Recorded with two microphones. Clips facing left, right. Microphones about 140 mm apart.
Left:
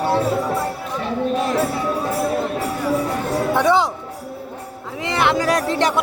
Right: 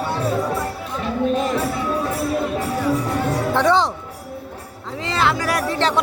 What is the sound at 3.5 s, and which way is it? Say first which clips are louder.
Speech: even; 10° left (ahead or behind).